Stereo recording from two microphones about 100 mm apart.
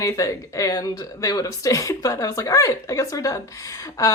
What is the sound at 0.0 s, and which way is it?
Speech, 30° left (ahead or behind).